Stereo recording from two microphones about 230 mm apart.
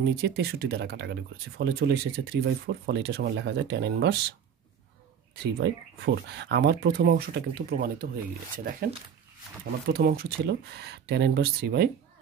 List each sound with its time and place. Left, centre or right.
0.0 s speech: right
5.4 s speech: right
9.8 s speech: right